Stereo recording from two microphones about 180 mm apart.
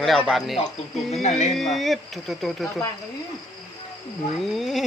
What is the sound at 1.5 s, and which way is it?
Speech, centre (ahead or behind).